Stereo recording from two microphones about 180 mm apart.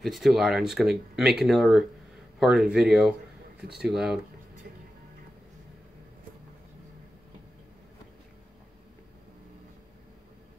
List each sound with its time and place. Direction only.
0.0 s speech: centre (ahead or behind)